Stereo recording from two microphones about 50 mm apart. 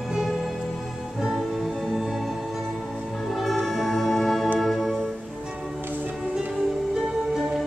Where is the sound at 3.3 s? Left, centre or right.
Centre.